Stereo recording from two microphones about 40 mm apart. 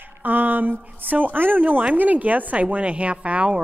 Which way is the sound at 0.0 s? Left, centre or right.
Right.